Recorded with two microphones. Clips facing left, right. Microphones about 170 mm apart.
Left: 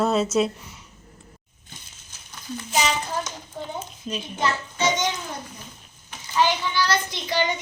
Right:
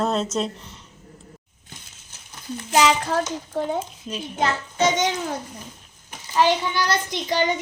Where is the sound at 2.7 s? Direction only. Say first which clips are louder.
Right 6 dB; 90° right.